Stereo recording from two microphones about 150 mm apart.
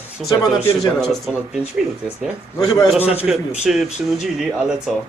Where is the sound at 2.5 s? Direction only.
25° left (ahead or behind).